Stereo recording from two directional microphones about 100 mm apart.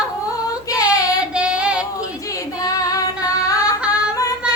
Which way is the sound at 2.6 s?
35° left (ahead or behind).